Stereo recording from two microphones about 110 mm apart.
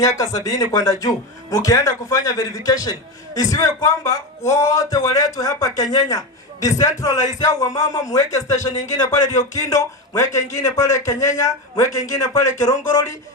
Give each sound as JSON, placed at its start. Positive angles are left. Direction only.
{"t": 0.0, "sound": "speech", "side_deg": 30}